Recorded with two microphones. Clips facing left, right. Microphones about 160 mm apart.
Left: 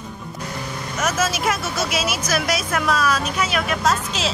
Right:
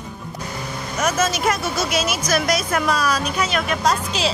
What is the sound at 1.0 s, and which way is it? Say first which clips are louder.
Speech: right 2 dB; 5° left (ahead or behind).